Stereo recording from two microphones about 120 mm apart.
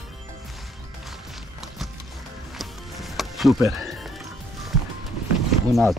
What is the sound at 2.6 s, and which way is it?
Music, centre (ahead or behind).